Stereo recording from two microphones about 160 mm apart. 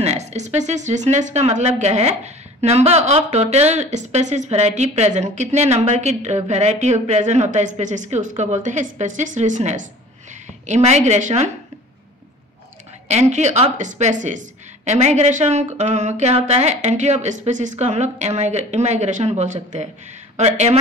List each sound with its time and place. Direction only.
0.0 s speech: 45° right (ahead or behind)
13.1 s speech: 45° right (ahead or behind)